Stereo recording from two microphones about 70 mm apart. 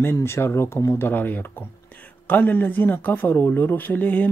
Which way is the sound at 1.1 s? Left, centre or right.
Left.